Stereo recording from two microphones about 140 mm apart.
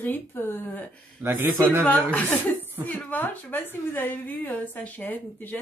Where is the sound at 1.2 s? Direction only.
15° right (ahead or behind).